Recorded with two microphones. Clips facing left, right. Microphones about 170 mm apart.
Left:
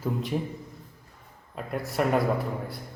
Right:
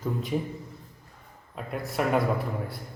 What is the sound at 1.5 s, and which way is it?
Speech, centre (ahead or behind).